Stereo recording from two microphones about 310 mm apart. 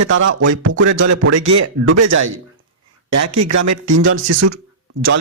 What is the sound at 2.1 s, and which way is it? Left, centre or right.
Speech, right.